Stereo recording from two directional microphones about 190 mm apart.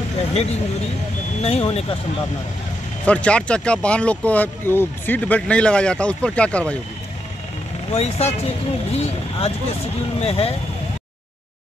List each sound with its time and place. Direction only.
0.3 s speech: 35° left (ahead or behind)
3.1 s speech: 5° left (ahead or behind)
7.9 s speech: 35° left (ahead or behind)